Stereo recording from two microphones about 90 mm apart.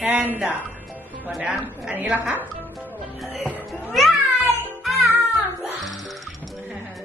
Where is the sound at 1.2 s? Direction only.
5° right (ahead or behind).